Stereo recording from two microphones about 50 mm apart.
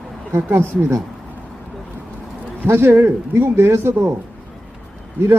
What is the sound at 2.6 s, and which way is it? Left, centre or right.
Speech, right.